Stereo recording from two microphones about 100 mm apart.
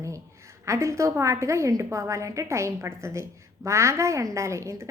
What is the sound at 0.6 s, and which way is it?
A woman's voice, 30° right (ahead or behind).